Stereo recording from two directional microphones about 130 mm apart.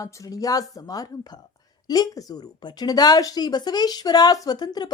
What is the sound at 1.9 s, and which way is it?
A woman's voice, 30° left (ahead or behind).